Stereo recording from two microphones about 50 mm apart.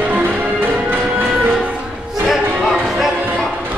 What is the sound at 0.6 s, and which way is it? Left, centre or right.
Music, right.